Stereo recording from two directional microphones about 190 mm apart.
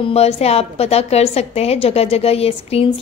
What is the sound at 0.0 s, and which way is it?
A woman's voice, 35° left (ahead or behind).